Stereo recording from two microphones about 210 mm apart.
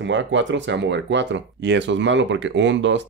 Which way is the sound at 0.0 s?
60° right (ahead or behind).